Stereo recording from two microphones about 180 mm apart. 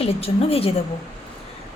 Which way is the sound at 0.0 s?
35° left (ahead or behind).